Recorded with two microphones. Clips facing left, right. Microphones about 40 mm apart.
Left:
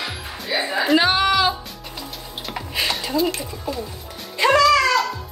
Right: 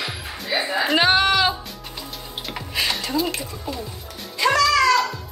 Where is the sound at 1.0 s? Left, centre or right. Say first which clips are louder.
Even; right.